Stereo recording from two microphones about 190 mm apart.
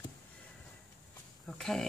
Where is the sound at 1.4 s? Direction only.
Centre (ahead or behind).